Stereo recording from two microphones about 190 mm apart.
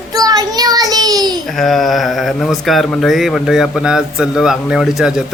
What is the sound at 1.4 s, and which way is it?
Speech, centre (ahead or behind).